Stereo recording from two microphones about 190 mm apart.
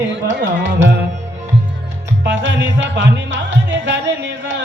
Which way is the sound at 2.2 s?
80° right.